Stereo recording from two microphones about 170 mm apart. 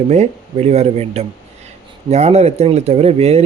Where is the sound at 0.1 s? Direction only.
40° right (ahead or behind).